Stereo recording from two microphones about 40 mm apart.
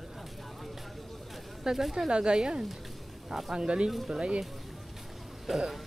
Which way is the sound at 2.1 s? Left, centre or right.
Right.